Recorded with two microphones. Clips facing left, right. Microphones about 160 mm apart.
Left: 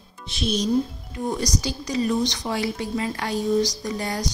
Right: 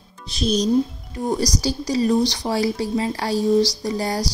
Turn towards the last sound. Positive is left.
turn(degrees=-35)  # may be behind; listen again after turning